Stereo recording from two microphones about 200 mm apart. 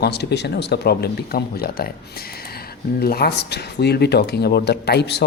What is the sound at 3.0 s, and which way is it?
Speech, 50° left (ahead or behind).